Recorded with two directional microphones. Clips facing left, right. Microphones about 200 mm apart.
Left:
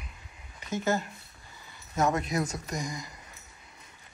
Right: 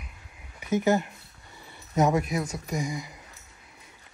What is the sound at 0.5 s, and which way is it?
Speech, 15° right (ahead or behind).